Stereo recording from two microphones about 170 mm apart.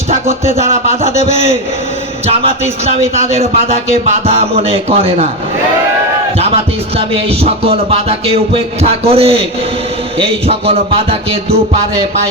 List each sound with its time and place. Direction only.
3.2 s music: 40° right (ahead or behind)
6.9 s music: 35° right (ahead or behind)